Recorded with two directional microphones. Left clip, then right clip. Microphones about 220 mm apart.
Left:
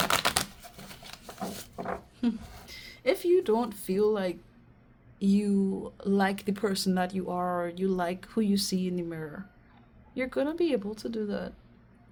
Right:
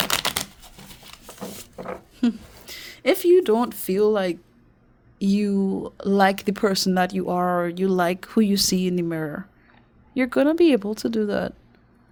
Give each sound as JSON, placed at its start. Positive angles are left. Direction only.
{"t": 0.0, "sound": "typewriter", "side_deg": -25}
{"t": 2.1, "sound": "speech", "side_deg": -50}